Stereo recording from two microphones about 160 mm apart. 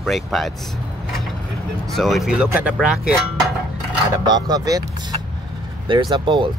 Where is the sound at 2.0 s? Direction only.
Centre (ahead or behind).